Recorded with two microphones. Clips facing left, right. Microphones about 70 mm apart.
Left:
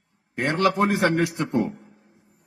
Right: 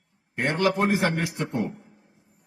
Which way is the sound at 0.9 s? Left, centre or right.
Left.